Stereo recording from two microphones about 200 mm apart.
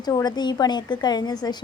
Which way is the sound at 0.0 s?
20° left (ahead or behind).